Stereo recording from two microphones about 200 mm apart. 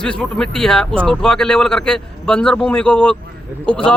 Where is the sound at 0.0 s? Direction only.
5° left (ahead or behind).